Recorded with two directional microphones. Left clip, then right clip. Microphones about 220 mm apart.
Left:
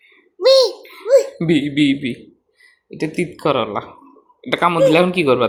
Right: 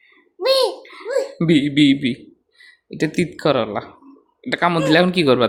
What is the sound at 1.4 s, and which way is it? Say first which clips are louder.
Speech: right 1 dB; 15° right (ahead or behind).